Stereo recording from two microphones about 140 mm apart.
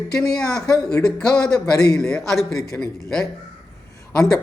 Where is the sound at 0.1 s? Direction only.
5° left (ahead or behind).